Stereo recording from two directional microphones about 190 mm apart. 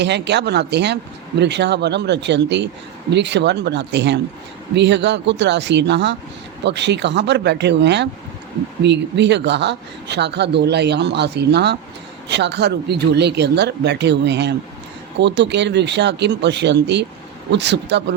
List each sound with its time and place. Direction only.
0.0 s speech: 65° right (ahead or behind)